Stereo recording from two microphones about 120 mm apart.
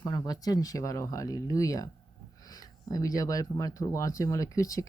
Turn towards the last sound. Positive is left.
turn(degrees=25)  # may be behind; listen again after turning